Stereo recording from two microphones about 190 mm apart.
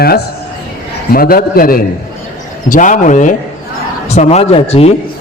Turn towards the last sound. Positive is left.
turn(degrees=30)  # may be behind; listen again after turning